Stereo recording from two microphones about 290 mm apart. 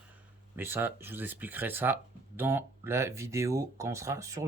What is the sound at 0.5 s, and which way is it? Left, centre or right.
Speech, centre.